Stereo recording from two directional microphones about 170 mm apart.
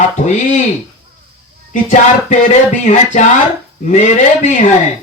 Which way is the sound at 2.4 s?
45° left (ahead or behind).